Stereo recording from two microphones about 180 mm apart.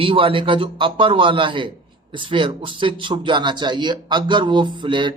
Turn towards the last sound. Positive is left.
turn(degrees=-25)  # may be behind; listen again after turning